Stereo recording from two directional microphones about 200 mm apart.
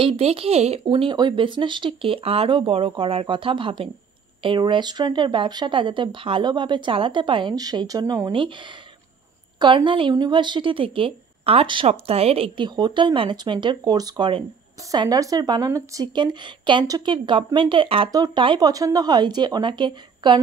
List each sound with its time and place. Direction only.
0.0 s speech: 30° right (ahead or behind)
9.6 s speech: 25° right (ahead or behind)